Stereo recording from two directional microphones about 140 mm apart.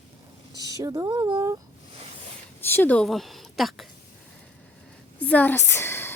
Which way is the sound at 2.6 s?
15° left (ahead or behind).